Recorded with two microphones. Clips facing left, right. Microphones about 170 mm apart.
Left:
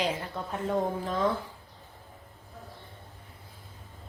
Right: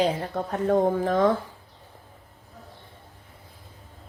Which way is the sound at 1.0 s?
50° right (ahead or behind).